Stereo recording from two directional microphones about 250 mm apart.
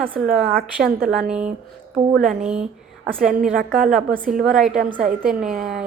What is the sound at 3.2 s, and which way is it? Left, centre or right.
A woman's voice, centre.